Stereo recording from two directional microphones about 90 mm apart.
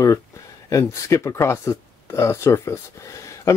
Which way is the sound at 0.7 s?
35° left (ahead or behind).